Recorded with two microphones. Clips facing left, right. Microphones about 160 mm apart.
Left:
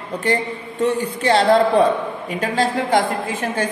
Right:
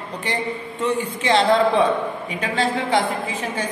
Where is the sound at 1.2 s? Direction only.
40° left (ahead or behind).